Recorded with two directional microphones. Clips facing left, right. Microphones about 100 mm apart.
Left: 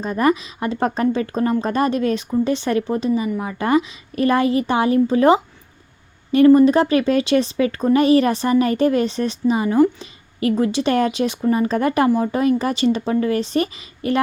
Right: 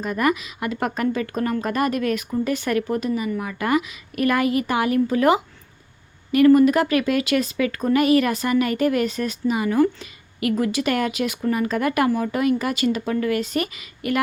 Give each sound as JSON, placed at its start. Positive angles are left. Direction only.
{"t": 0.0, "sound": "a woman's voice", "side_deg": 30}